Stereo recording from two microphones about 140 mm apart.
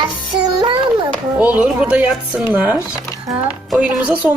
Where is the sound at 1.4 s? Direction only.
10° right (ahead or behind).